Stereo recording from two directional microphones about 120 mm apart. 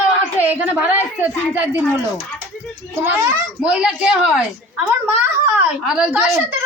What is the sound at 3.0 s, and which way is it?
Speech, 15° right (ahead or behind).